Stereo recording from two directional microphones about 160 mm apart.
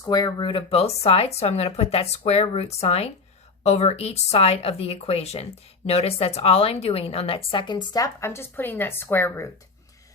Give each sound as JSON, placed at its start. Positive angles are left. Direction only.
{"t": 0.0, "sound": "speech", "side_deg": 25}